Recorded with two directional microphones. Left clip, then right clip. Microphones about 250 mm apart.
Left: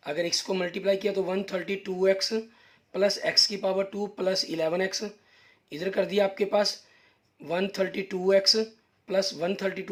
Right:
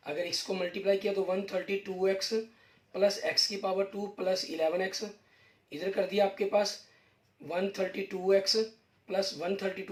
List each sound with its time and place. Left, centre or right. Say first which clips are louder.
0.0 s speech: left 5 dB; left